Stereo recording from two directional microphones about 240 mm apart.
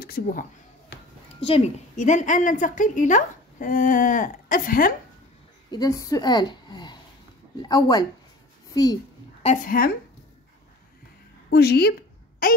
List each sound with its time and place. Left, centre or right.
0.0 s a sound: left
1.4 s a woman's voice: left
5.7 s a woman's voice: centre
9.4 s a woman's voice: left
11.5 s a woman's voice: left